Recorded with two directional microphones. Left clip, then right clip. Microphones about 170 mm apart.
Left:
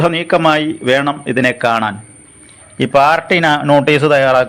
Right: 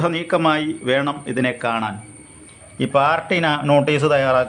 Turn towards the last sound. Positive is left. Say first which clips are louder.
# left 6 dB
turn(degrees=20)  # may be behind; listen again after turning